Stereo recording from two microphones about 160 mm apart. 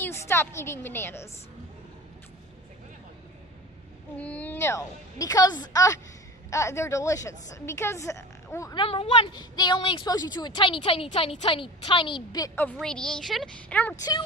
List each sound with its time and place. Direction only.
0.0 s a woman's voice: 15° left (ahead or behind)
4.2 s a woman's voice: 10° left (ahead or behind)
8.8 s a woman's voice: 35° left (ahead or behind)
12.5 s a woman's voice: 10° left (ahead or behind)
14.0 s a woman's voice: 25° left (ahead or behind)